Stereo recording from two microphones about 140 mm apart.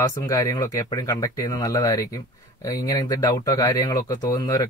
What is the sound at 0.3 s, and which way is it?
Speech, 25° left (ahead or behind).